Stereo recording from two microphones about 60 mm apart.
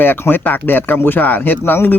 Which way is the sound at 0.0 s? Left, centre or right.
Left.